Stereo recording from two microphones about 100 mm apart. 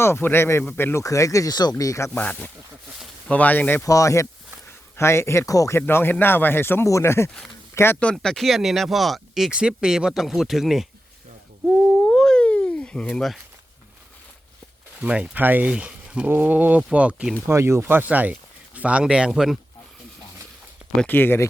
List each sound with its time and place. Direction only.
0.0 s speech: 25° left (ahead or behind); by 1.7 s 40° left (ahead or behind)
1.8 s speech: 30° left (ahead or behind)
2.1 s speech: 15° left (ahead or behind)
3.8 s speech: 35° left (ahead or behind)
5.8 s speech: 20° left (ahead or behind)
8.1 s speech: 5° left (ahead or behind)
11.9 s a sound: 10° left (ahead or behind)
15.0 s speech: 10° right (ahead or behind)
17.5 s speech: 25° right (ahead or behind); by 19.5 s 5° right (ahead or behind)
21.1 s speech: 20° left (ahead or behind)